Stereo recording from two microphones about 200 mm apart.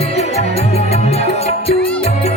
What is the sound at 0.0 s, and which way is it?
Music, 30° left (ahead or behind).